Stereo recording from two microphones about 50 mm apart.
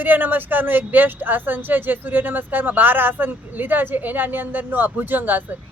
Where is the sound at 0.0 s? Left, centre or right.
Right.